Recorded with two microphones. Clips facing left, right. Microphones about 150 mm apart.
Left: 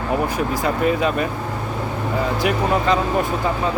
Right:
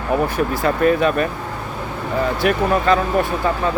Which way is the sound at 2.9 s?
20° left (ahead or behind).